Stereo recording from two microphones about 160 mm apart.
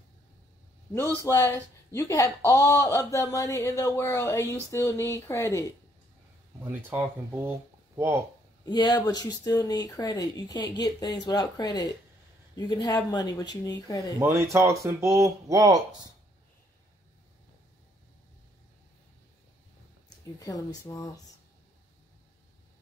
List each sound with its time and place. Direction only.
1.2 s speech: 20° left (ahead or behind)
6.7 s speech: 10° right (ahead or behind)
8.6 s speech: 25° left (ahead or behind)
14.2 s speech: 15° right (ahead or behind)
20.3 s speech: 20° left (ahead or behind)